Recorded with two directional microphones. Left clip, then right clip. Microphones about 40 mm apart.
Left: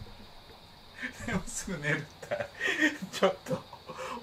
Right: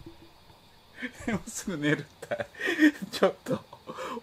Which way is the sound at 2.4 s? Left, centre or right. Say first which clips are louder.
Right 4 dB; centre.